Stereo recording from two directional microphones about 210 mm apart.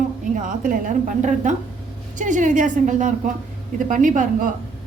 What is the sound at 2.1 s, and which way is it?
A woman's voice, 35° right (ahead or behind).